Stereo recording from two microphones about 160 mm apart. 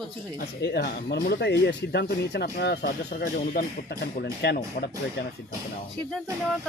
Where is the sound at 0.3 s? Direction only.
90° left.